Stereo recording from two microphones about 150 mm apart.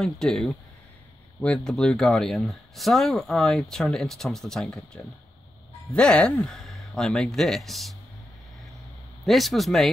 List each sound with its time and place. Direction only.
0.0 s speech: centre (ahead or behind)
9.2 s speech: centre (ahead or behind)